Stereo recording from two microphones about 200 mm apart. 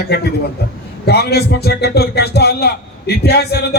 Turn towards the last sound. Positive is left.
turn(degrees=55)  # may be behind; listen again after turning